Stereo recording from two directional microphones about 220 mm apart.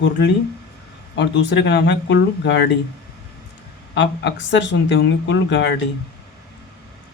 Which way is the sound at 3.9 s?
50° left (ahead or behind).